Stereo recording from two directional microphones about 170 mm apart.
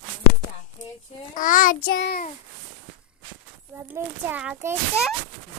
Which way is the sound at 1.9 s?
90° left.